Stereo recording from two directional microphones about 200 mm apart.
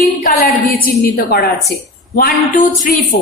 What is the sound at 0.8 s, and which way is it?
A woman's voice, 50° left (ahead or behind).